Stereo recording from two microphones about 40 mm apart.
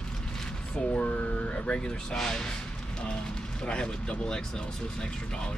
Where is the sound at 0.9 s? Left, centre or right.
Left; by 2.5 s centre.